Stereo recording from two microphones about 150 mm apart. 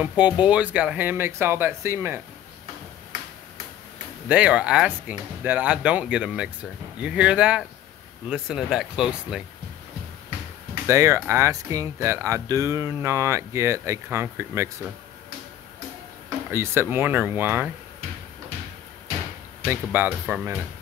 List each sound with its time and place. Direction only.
0.0 s speech: 10° right (ahead or behind)
4.3 s speech: 10° right (ahead or behind)
10.9 s speech: 20° right (ahead or behind)
16.4 s speech: 15° right (ahead or behind)
19.7 s speech: 15° right (ahead or behind)